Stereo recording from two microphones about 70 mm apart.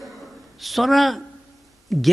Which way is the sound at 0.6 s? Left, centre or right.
Centre.